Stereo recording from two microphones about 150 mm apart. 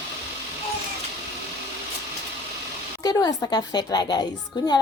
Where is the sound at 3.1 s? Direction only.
25° left (ahead or behind).